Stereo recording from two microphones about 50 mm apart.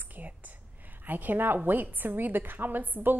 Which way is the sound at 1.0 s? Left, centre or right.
Right.